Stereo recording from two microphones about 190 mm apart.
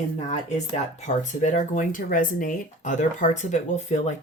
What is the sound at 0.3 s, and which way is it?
Speech, 35° left (ahead or behind).